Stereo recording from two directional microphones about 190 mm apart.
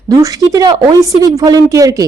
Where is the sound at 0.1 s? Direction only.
20° right (ahead or behind).